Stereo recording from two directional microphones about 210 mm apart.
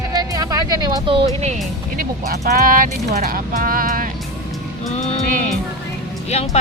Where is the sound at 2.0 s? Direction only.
45° right (ahead or behind).